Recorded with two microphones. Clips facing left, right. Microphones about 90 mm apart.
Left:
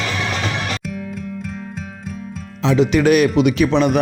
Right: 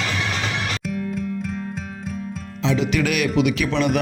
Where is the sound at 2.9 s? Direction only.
35° left (ahead or behind).